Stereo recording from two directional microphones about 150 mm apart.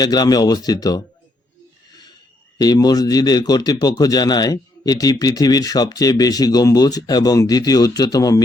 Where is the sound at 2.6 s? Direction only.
25° left (ahead or behind).